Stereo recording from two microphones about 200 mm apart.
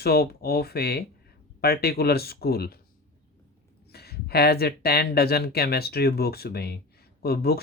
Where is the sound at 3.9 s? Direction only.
50° left (ahead or behind).